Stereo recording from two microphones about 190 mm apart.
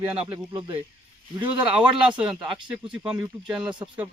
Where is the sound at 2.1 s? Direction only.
25° right (ahead or behind).